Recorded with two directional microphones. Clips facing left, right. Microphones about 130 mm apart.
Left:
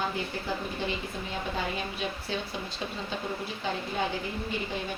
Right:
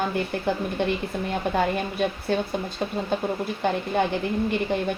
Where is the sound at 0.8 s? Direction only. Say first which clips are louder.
Right 10 dB; 65° right (ahead or behind).